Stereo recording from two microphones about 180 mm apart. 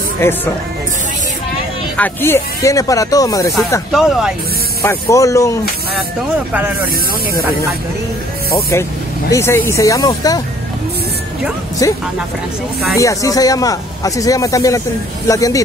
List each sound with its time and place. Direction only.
0.2 s speech: 15° left (ahead or behind)
2.0 s speech: 10° left (ahead or behind)
3.9 s speech: centre (ahead or behind)
4.8 s speech: 15° left (ahead or behind)
9.3 s speech: 15° left (ahead or behind)
11.8 s speech: 20° left (ahead or behind)
13.0 s speech: 15° left (ahead or behind)